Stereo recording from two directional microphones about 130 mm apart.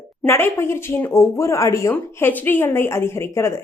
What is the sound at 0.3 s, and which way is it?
A woman's voice, 20° left (ahead or behind).